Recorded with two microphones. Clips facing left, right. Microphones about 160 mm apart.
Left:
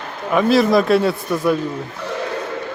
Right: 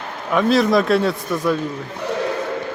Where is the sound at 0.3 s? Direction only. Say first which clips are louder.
Left 2 dB; centre (ahead or behind).